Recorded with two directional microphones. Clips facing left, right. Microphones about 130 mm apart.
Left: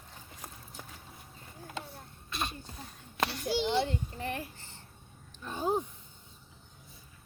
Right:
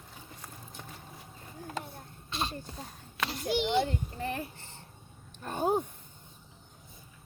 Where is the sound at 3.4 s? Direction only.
20° right (ahead or behind).